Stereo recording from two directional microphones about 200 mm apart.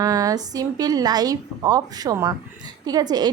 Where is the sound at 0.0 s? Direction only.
15° right (ahead or behind).